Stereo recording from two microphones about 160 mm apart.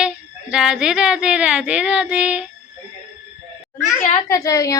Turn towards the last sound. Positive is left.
turn(degrees=20)  # may be behind; listen again after turning